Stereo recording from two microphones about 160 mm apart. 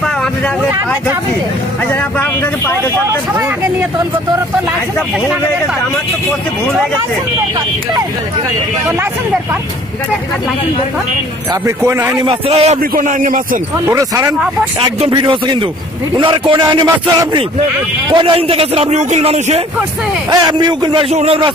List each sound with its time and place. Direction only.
11.6 s a man's voice: 15° right (ahead or behind)
12.2 s a man's voice: 30° right (ahead or behind)
12.9 s a man's voice: 60° right (ahead or behind)
13.8 s a man's voice: 20° right (ahead or behind); by 19.6 s 40° right (ahead or behind)
20.2 s a man's voice: 25° right (ahead or behind)
21.1 s a man's voice: 40° right (ahead or behind)